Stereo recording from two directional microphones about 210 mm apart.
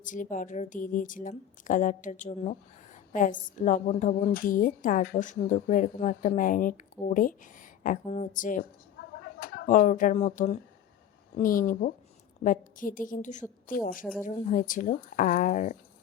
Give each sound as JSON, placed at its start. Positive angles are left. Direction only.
{"t": 0.0, "sound": "a woman's voice", "side_deg": 40}